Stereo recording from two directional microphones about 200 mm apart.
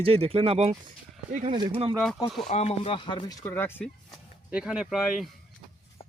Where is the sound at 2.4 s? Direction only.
30° left (ahead or behind).